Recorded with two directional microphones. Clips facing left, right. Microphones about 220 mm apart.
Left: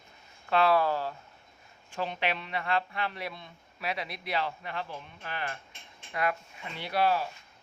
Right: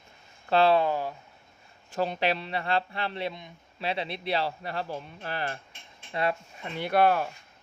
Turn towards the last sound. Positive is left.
turn(degrees=-55)  # may be behind; listen again after turning